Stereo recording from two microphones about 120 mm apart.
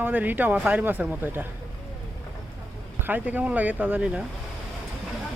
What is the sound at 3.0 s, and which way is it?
Speech, 15° right (ahead or behind).